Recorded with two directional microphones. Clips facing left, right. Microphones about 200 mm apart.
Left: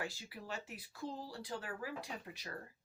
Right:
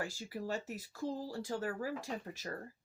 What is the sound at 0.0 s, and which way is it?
Speech, 40° right (ahead or behind).